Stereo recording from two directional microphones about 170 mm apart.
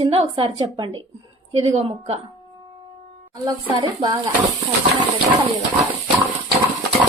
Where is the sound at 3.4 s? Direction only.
25° right (ahead or behind).